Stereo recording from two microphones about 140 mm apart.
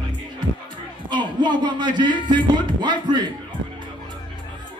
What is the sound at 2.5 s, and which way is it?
Speech, 35° right (ahead or behind).